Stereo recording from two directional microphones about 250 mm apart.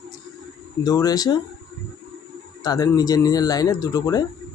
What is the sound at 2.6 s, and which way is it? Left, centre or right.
Speech, centre.